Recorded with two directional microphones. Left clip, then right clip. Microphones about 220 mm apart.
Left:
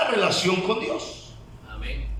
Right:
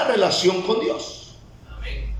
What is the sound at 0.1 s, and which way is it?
Speech, 25° right (ahead or behind).